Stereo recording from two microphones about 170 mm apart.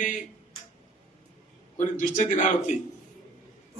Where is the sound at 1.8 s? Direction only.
50° left (ahead or behind).